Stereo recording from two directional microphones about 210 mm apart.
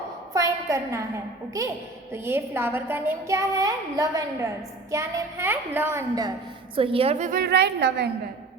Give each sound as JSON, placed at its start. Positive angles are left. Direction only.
{"t": 0.3, "sound": "a sound", "side_deg": -15}
{"t": 2.1, "sound": "a woman's voice", "side_deg": -10}
{"t": 6.7, "sound": "a woman's voice", "side_deg": -25}